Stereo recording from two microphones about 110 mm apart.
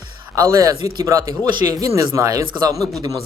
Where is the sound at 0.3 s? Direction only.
30° right (ahead or behind).